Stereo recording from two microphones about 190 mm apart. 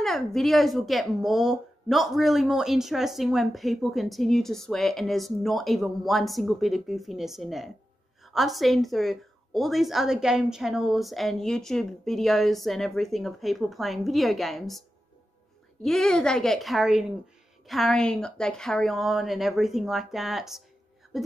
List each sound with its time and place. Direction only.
0.0 s a woman's voice: centre (ahead or behind)